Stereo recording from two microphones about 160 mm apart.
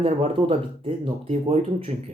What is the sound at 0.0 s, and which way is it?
Speech, 35° right (ahead or behind).